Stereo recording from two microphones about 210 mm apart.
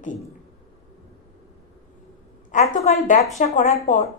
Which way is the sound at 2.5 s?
35° left (ahead or behind).